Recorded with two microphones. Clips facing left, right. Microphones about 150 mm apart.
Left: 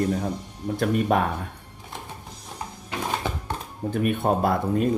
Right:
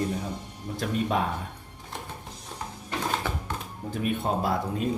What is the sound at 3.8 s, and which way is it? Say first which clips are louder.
Speech: left 5 dB; 55° left (ahead or behind).